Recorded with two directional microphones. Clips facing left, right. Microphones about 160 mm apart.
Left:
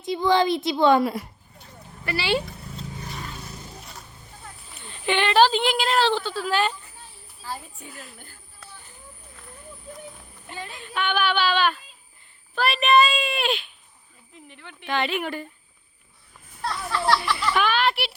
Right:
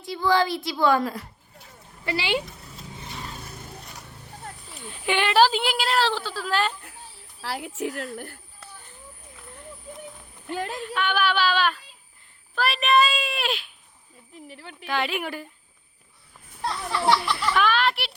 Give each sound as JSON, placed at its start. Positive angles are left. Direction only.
{"t": 0.0, "sound": "a woman's voice", "side_deg": 20}
{"t": 2.0, "sound": "a sound", "side_deg": -15}
{"t": 4.8, "sound": "speech", "side_deg": -5}
{"t": 7.4, "sound": "a woman's voice", "side_deg": -85}
{"t": 10.5, "sound": "speech", "side_deg": -55}
{"t": 10.8, "sound": "speech", "side_deg": 0}
{"t": 14.6, "sound": "a woman's voice", "side_deg": -35}
{"t": 14.8, "sound": "speech", "side_deg": -5}
{"t": 16.6, "sound": "a sound", "side_deg": -15}
{"t": 17.3, "sound": "speech", "side_deg": 0}